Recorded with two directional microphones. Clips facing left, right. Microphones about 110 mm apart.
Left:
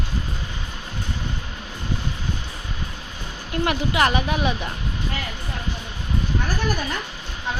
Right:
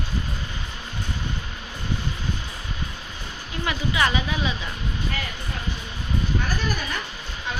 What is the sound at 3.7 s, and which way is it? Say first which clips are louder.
A woman's voice: left 3 dB; 60° left (ahead or behind).